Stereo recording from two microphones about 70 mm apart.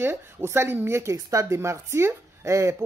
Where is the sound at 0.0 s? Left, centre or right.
Right.